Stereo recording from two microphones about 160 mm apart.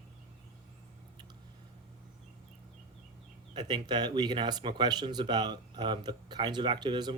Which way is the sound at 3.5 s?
25° right (ahead or behind).